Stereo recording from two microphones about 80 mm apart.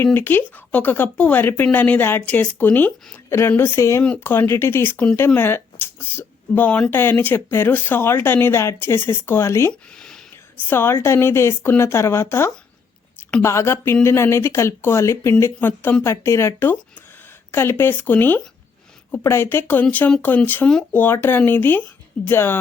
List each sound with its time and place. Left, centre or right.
0.0 s speech: left
9.9 s a sound: centre
10.7 s speech: left